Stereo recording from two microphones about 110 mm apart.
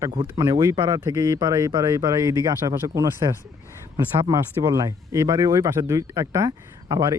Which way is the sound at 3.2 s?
35° right (ahead or behind).